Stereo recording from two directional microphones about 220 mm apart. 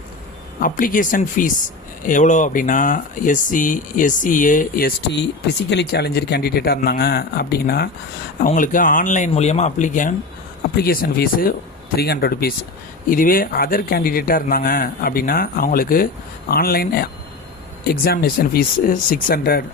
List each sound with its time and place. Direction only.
0.6 s speech: 40° left (ahead or behind)
8.4 s speech: 40° left (ahead or behind)